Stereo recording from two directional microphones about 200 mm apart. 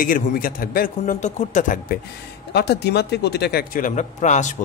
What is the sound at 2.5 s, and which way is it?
Speech, 55° left (ahead or behind).